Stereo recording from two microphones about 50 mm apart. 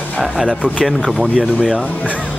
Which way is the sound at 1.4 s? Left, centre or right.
Centre.